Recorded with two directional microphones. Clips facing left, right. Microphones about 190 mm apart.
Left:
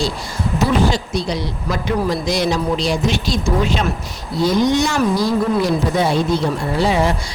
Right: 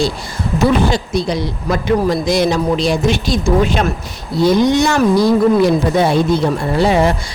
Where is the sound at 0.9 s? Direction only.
55° right (ahead or behind).